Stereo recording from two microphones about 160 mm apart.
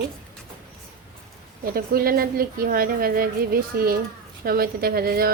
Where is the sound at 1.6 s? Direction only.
70° right (ahead or behind).